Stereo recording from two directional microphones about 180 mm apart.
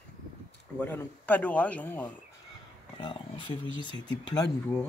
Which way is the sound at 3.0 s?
30° left (ahead or behind).